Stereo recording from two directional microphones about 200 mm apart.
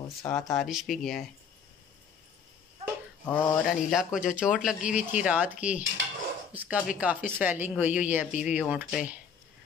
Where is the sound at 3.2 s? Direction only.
10° left (ahead or behind).